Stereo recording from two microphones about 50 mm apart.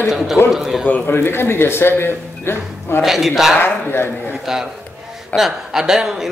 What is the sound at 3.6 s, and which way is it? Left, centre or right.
Speech, left.